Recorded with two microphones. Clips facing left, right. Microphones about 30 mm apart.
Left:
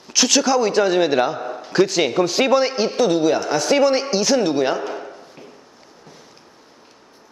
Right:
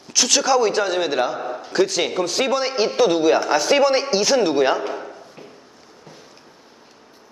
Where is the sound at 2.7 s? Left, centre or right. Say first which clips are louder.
Right 1 dB; centre.